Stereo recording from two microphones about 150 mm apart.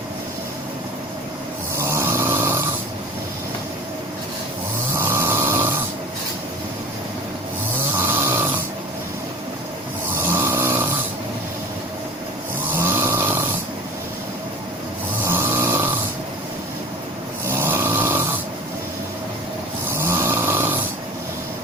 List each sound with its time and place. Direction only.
1.7 s snoring: 20° right (ahead or behind)
4.9 s snoring: 15° right (ahead or behind)
7.9 s snoring: 15° right (ahead or behind)
10.2 s snoring: 15° right (ahead or behind)
12.7 s snoring: 15° right (ahead or behind)
15.2 s vehicle: 15° right (ahead or behind)
17.4 s snoring: 15° right (ahead or behind)
19.9 s snoring: 15° right (ahead or behind)